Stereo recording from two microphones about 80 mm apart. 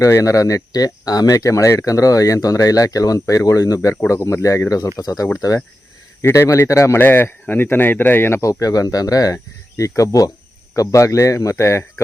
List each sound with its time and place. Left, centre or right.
0.0 s speech: left
6.2 s speech: left
7.0 s speech: left
8.4 s speech: left